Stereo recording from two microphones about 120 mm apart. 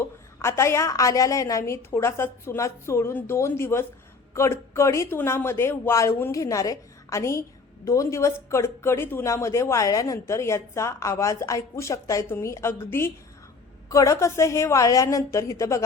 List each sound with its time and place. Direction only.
0.0 s speech: 20° left (ahead or behind)